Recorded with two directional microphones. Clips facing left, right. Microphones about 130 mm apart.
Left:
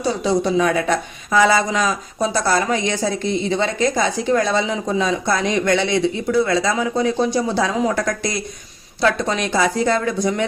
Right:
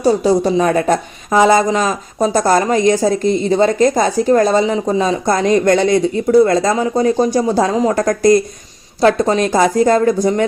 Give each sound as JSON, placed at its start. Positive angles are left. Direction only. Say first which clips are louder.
{"t": 0.0, "sound": "a woman's voice", "louder": "right 6 dB", "side_deg": -40}